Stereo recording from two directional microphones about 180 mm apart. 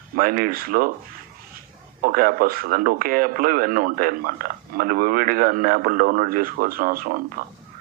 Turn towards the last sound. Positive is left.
turn(degrees=-55)  # may be behind; listen again after turning